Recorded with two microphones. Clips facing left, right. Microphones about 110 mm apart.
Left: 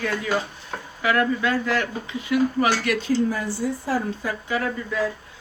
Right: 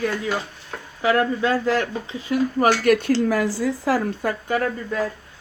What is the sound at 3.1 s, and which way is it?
Speech, 90° right.